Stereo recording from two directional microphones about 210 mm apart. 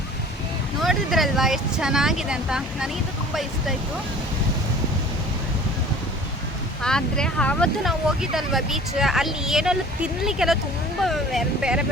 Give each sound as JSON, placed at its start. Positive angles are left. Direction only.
{"t": 0.8, "sound": "speech", "side_deg": 0}
{"t": 6.8, "sound": "speech", "side_deg": 5}